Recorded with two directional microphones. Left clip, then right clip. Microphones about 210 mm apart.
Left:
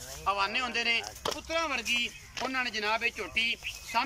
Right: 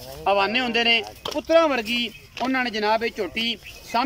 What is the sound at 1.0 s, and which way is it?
Speech, centre (ahead or behind).